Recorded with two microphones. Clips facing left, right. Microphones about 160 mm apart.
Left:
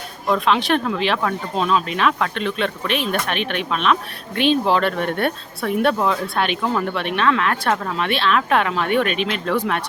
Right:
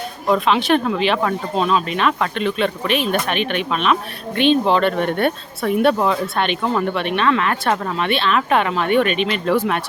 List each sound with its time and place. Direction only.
0.3 s speech: centre (ahead or behind)